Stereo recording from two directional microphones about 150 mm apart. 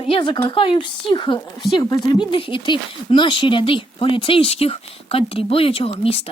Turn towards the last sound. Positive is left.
turn(degrees=40)  # may be behind; listen again after turning